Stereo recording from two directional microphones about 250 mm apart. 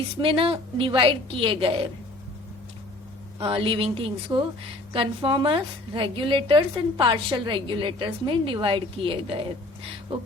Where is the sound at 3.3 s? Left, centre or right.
Right.